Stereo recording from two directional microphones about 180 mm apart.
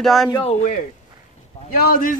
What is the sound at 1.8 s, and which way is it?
Speech, 50° left (ahead or behind).